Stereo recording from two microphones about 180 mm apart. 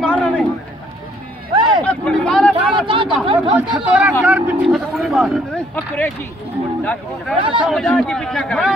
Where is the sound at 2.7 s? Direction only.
25° right (ahead or behind).